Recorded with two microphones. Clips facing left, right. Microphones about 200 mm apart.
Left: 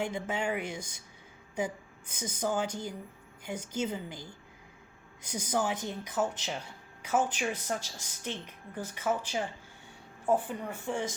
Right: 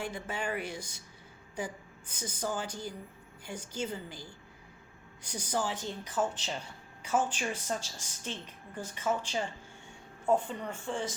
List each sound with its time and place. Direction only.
0.0 s a woman's voice: 20° left (ahead or behind)
2.2 s a woman's voice: 20° left (ahead or behind)